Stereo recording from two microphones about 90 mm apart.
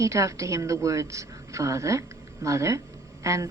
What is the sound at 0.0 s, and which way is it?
A woman's voice, 35° right (ahead or behind).